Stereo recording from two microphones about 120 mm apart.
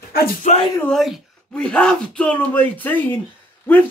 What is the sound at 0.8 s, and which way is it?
Speech, 5° left (ahead or behind).